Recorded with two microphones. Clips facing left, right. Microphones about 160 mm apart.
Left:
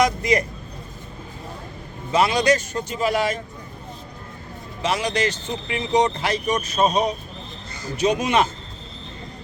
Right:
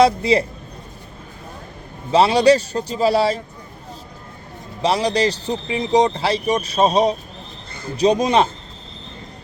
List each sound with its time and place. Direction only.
0.0 s speech: 30° right (ahead or behind)
2.1 s speech: 30° right (ahead or behind)
4.8 s speech: 35° right (ahead or behind)